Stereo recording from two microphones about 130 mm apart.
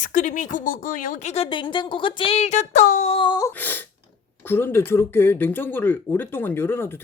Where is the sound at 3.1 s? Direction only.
40° left (ahead or behind).